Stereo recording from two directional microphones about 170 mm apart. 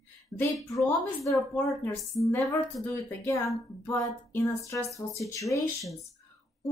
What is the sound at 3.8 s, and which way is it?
A woman's voice, 15° left (ahead or behind).